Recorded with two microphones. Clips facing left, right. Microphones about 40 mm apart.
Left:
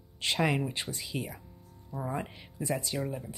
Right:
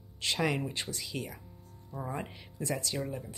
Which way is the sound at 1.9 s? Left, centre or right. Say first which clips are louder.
Left 3 dB; centre.